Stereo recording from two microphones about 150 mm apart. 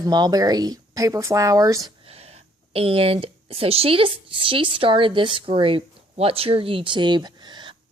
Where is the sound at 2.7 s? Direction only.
40° right (ahead or behind).